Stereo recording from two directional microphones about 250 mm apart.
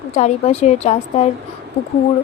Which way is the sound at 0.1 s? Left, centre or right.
Left.